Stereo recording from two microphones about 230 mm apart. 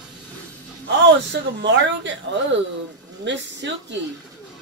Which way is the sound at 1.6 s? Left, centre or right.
Right.